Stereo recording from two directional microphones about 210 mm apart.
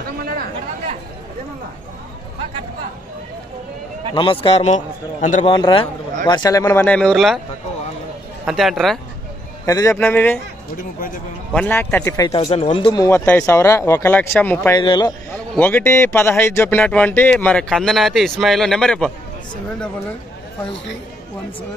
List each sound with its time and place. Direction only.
4.1 s a man's voice: 25° left (ahead or behind)
5.4 s a man's voice: 25° left (ahead or behind); by 7.3 s centre (ahead or behind)
8.5 s a man's voice: centre (ahead or behind)
9.7 s speech: 15° left (ahead or behind)
11.5 s speech: 10° left (ahead or behind)
14.8 s a man's voice: 20° left (ahead or behind)
15.3 s a man's voice: 5° left (ahead or behind)